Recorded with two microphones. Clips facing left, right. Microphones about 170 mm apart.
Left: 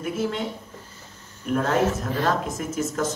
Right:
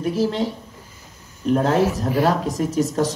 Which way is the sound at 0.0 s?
35° right (ahead or behind).